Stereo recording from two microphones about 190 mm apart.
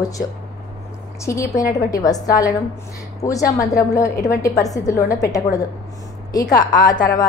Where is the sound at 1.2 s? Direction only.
15° left (ahead or behind).